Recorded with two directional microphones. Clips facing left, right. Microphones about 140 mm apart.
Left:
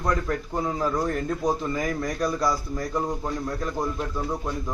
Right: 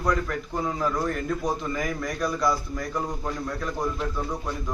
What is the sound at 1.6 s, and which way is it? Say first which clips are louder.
A man's voice: left 2 dB; 30° left (ahead or behind).